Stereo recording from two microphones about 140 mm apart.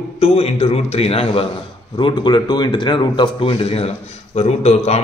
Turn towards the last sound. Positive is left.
turn(degrees=50)  # may be behind; listen again after turning